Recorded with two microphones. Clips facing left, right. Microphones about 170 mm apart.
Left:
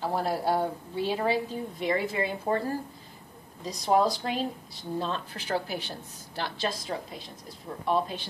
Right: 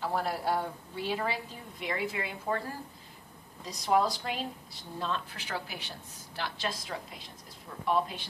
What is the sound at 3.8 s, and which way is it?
A woman's voice, 35° left (ahead or behind).